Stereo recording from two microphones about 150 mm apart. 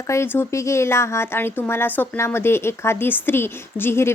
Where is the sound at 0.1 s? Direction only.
15° left (ahead or behind).